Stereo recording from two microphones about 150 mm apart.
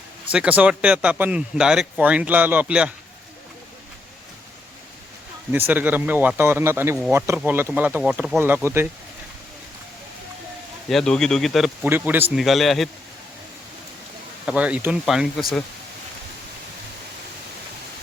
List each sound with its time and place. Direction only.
0.3 s speech: 10° right (ahead or behind)
5.5 s speech: 10° right (ahead or behind)
10.8 s speech: 5° left (ahead or behind)
11.9 s speech: 15° right (ahead or behind)
12.4 s speech: centre (ahead or behind)
14.4 s speech: 10° right (ahead or behind)